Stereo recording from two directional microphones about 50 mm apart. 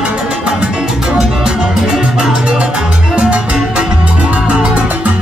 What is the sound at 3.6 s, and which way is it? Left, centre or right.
Music, centre.